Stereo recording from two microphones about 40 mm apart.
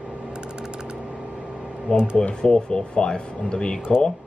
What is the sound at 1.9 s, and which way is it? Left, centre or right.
Speech, right.